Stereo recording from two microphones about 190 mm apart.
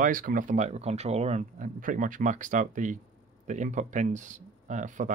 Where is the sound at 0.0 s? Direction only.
45° right (ahead or behind).